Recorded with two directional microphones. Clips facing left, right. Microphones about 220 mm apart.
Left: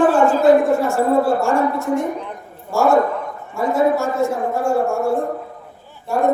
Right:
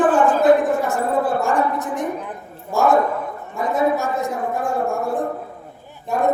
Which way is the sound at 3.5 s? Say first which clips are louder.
Left 3 dB; 15° right (ahead or behind).